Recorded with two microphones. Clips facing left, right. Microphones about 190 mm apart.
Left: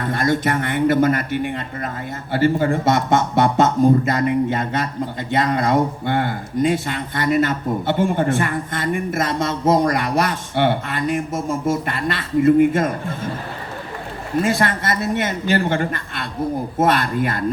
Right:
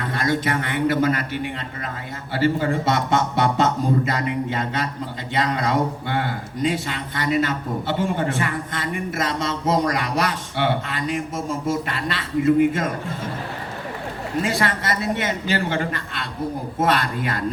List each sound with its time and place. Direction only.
0.0 s speech: 50° left (ahead or behind)
14.4 s speech: 50° left (ahead or behind)